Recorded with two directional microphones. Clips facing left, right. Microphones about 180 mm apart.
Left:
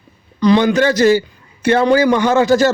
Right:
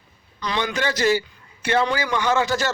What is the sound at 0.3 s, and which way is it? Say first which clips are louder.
A man's voice: left 13 dB; 35° left (ahead or behind).